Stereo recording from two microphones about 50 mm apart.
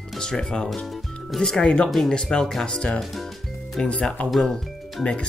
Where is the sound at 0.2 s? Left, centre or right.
Centre.